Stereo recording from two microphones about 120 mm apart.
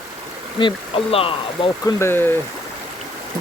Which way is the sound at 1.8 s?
20° left (ahead or behind).